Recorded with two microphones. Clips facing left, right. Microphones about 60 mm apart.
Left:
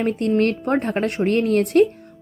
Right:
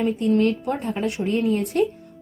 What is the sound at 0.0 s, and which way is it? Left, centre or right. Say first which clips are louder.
A woman's voice: left 1 dB; left.